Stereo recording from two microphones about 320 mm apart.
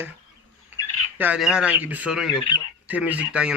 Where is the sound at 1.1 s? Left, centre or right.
Centre.